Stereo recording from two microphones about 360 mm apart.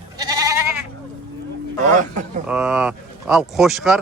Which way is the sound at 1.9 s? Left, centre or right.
Right.